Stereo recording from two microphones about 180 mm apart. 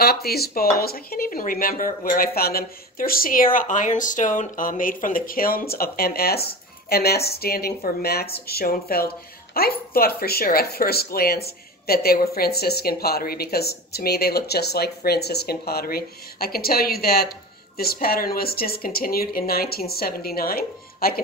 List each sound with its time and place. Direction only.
0.0 s speech: 60° left (ahead or behind)